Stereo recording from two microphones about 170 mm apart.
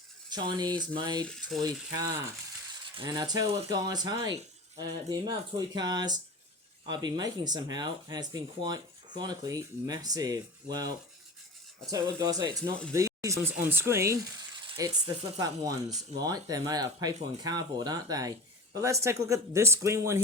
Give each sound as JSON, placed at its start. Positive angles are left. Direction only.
{"t": 0.3, "sound": "speech", "side_deg": -25}
{"t": 1.2, "sound": "speech", "side_deg": 5}
{"t": 3.0, "sound": "speech", "side_deg": -20}